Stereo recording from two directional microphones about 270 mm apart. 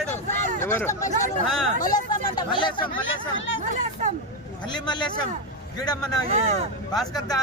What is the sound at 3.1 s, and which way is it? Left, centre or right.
Speech, left.